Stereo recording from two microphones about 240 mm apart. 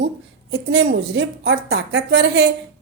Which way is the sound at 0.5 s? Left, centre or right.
Right.